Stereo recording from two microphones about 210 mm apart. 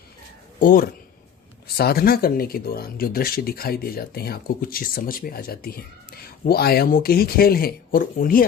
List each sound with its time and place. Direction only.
0.6 s speech: 40° left (ahead or behind)